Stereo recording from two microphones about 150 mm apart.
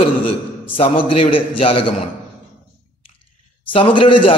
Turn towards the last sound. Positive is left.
turn(degrees=35)  # may be behind; listen again after turning